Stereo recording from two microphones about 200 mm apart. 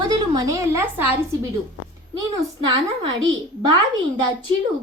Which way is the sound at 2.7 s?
20° right (ahead or behind).